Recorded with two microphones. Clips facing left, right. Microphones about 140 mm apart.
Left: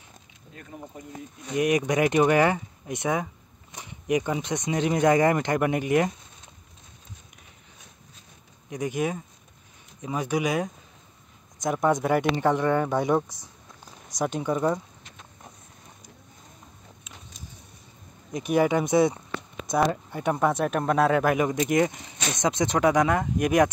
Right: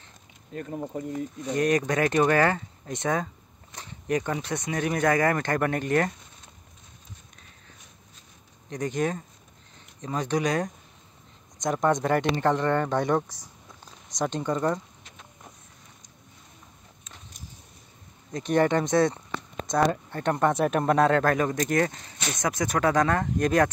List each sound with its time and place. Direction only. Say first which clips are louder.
1.5 s speech: left 1 dB; 10° left (ahead or behind)
8.6 s speech: even; 10° left (ahead or behind)
18.3 s speech: even; 10° left (ahead or behind)